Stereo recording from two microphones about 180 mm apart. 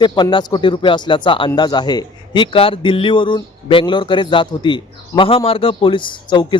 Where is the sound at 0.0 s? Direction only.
25° left (ahead or behind).